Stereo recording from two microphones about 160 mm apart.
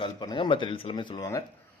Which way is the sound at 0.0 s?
30° left (ahead or behind).